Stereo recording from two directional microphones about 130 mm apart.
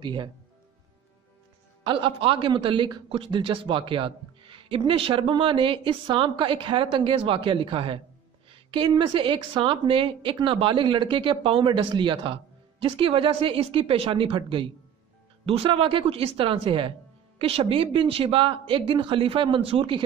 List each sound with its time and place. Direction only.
0.0 s a man's voice: 35° right (ahead or behind)
1.9 s a man's voice: 40° right (ahead or behind)